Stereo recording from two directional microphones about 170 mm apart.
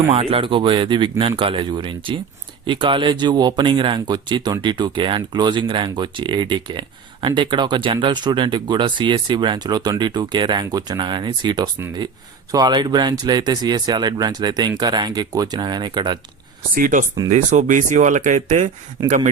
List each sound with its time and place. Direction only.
0.1 s speech: 35° right (ahead or behind)
16.7 s speech: 50° right (ahead or behind)